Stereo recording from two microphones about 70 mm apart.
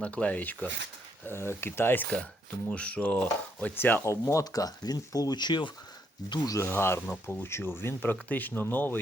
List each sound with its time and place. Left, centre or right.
0.0 s speech: centre
1.3 s speech: left
2.6 s speech: centre
4.0 s speech: left
6.5 s speech: left